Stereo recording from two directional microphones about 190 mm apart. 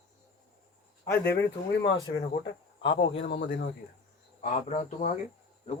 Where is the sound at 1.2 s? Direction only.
65° left (ahead or behind).